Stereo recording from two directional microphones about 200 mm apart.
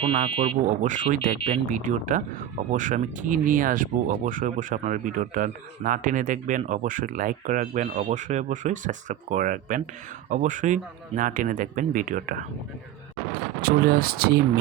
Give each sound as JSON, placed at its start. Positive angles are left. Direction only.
{"t": 0.0, "sound": "speech", "side_deg": -30}
{"t": 13.6, "sound": "speech", "side_deg": -50}